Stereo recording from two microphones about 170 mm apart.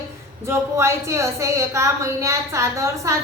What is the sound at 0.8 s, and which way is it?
A woman's voice, 15° right (ahead or behind).